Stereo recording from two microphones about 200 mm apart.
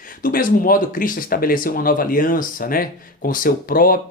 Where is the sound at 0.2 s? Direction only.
45° left (ahead or behind).